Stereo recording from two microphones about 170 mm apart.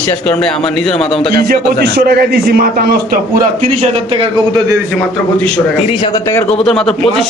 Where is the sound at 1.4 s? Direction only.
65° right (ahead or behind).